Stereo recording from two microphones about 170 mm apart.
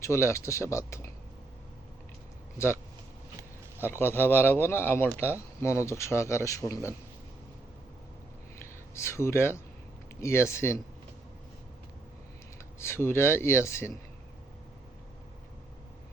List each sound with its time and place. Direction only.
0.0 s speech: 15° left (ahead or behind)
3.8 s speech: 15° left (ahead or behind)
9.0 s speech: 15° left (ahead or behind)
12.8 s speech: 15° left (ahead or behind)